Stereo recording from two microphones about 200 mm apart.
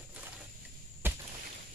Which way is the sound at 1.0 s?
10° right (ahead or behind).